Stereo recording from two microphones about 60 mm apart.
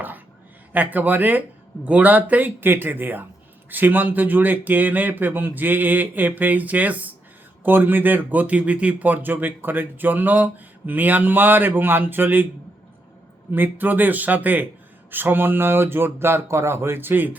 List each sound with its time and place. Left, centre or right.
0.7 s a man's voice: right
13.5 s a man's voice: right